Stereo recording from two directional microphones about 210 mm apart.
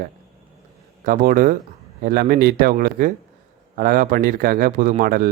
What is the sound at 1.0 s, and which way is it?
Speech, 40° right (ahead or behind).